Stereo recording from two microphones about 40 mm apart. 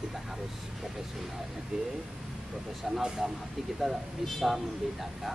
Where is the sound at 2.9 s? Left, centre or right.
Centre.